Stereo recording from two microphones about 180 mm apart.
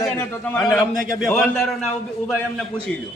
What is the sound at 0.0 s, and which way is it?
Speech, 5° left (ahead or behind).